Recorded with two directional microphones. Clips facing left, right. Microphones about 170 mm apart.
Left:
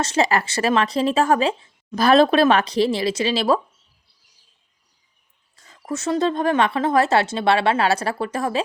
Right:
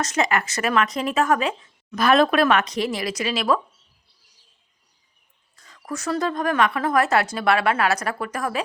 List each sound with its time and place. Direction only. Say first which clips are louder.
0.0 s speech: left 3 dB; 30° left (ahead or behind)
5.6 s speech: left 3 dB; 25° left (ahead or behind)